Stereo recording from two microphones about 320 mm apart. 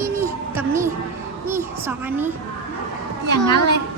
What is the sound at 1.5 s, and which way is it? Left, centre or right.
Speech, centre.